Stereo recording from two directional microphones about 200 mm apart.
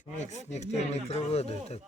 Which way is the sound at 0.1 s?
35° left (ahead or behind).